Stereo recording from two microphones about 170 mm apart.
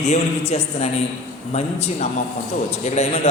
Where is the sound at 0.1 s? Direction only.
40° left (ahead or behind).